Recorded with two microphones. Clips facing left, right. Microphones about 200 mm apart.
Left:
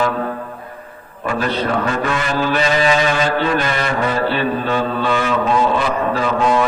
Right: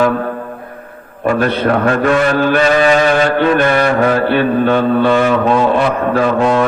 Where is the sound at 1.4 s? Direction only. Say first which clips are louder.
Right 4 dB; 60° right (ahead or behind).